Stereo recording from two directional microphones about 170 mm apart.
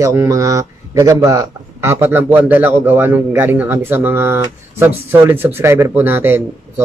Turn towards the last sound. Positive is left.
turn(degrees=-15)  # may be behind; listen again after turning